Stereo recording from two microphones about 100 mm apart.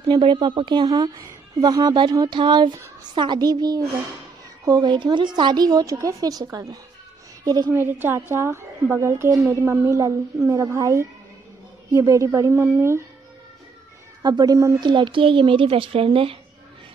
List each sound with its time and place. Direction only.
0.1 s a woman's voice: 55° right (ahead or behind)
7.7 s a woman's voice: 20° right (ahead or behind)
14.2 s a woman's voice: 40° right (ahead or behind)
14.8 s speech: 50° right (ahead or behind); by 16.3 s 65° right (ahead or behind)